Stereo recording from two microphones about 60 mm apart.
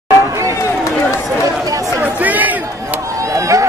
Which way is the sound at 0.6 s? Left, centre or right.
Left.